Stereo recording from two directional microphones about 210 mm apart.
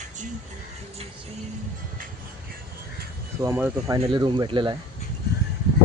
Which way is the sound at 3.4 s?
10° right (ahead or behind).